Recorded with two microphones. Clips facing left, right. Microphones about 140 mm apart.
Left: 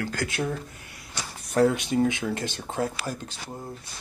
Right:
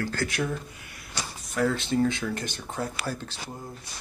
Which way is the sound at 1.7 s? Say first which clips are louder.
Left 1 dB; 15° left (ahead or behind).